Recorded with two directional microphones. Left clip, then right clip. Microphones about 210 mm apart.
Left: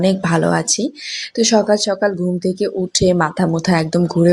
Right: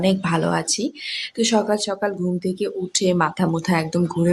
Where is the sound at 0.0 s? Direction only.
20° left (ahead or behind).